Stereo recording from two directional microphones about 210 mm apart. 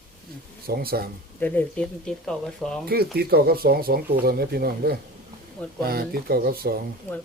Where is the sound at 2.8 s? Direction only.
45° right (ahead or behind).